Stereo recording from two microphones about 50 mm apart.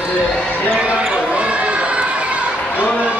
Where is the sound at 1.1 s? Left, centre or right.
Right.